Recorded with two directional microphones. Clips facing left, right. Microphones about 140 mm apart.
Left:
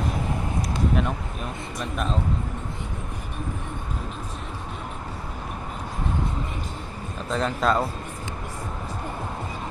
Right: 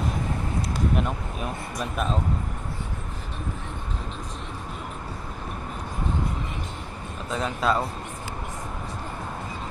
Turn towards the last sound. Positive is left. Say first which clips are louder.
# left 2 dB
turn(degrees=-5)  # may be behind; listen again after turning